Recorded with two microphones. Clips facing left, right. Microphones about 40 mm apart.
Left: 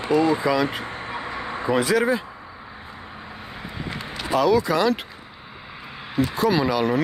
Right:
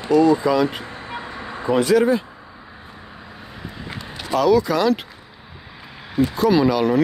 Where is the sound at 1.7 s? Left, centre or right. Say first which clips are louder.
Right 4 dB; centre.